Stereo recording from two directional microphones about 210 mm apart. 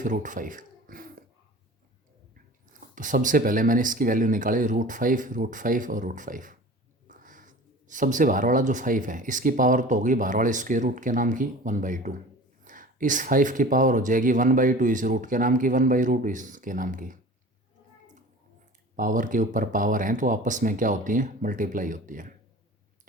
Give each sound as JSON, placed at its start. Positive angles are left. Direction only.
{"t": 0.0, "sound": "speech", "side_deg": -35}
{"t": 2.9, "sound": "speech", "side_deg": -40}
{"t": 18.9, "sound": "speech", "side_deg": -40}